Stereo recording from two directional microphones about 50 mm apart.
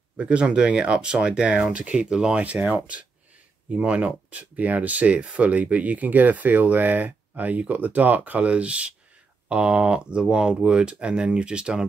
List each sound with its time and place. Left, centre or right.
0.2 s speech: right